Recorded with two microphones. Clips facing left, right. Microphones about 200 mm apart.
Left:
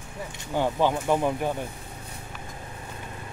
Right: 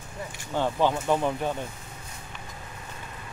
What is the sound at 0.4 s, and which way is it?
Speech, 10° left (ahead or behind).